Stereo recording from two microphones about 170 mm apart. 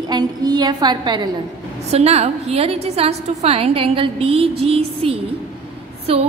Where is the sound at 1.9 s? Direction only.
40° right (ahead or behind).